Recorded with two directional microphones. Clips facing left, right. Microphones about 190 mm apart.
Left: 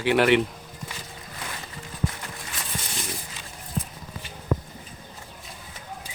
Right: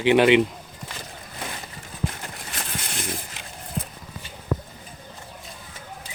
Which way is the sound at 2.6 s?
60° right (ahead or behind).